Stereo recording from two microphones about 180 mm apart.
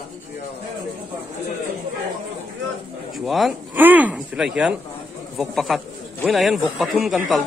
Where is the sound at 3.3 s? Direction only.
Centre (ahead or behind).